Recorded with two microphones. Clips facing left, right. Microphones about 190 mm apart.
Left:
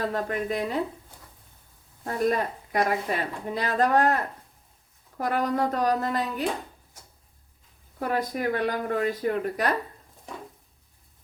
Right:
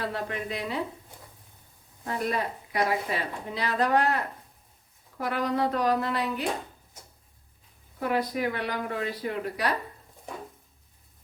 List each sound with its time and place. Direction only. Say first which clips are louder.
0.1 s a woman's voice: left 5 dB; 45° left (ahead or behind)
2.0 s a woman's voice: left 4 dB; 50° left (ahead or behind)
7.9 s a woman's voice: even; 45° left (ahead or behind)